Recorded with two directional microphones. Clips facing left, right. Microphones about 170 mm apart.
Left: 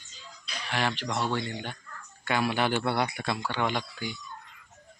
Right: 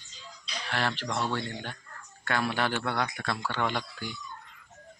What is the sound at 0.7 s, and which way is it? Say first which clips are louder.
Speech: left 1 dB; 10° left (ahead or behind).